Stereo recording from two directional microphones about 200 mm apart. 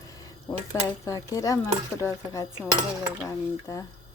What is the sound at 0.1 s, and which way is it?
A woman's voice, 20° left (ahead or behind).